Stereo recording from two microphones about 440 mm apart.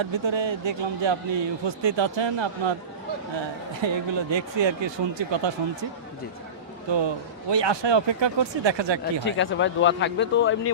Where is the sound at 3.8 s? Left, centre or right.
Right.